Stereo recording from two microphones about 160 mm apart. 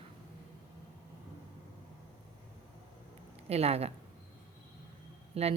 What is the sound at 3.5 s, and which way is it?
Speech, 40° right (ahead or behind).